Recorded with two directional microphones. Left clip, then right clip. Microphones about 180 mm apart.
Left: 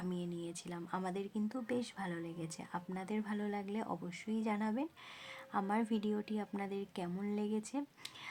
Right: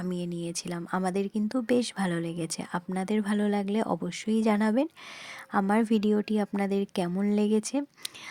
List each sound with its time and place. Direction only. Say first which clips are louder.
0.0 s speech: right 9 dB; 40° right (ahead or behind)